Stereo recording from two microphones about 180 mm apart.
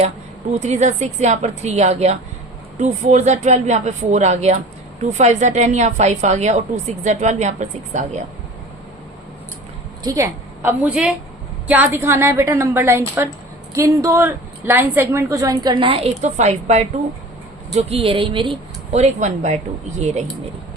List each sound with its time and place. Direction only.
0.6 s a woman's voice: 40° right (ahead or behind)
10.0 s a woman's voice: 20° right (ahead or behind); by 20.2 s 40° right (ahead or behind)